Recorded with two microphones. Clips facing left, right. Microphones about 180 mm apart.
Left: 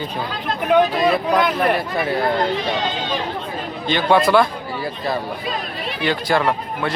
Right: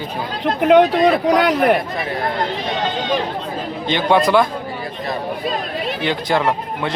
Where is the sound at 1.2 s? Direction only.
80° right.